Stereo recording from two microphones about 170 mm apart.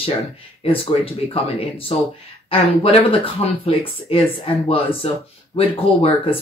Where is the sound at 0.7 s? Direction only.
35° left (ahead or behind).